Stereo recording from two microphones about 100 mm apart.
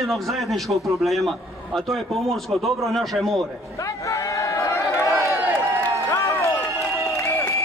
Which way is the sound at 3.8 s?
30° left (ahead or behind).